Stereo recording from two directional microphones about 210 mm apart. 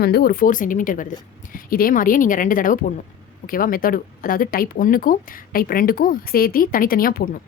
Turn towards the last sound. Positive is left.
turn(degrees=40)  # may be behind; listen again after turning